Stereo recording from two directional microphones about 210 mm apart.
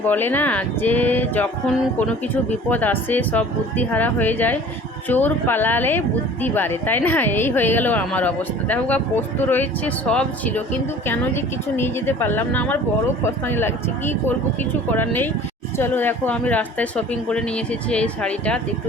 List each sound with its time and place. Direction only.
0.0 s a woman's voice: 10° left (ahead or behind)